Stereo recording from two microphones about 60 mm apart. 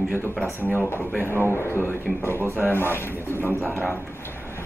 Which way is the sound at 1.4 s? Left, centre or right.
Left.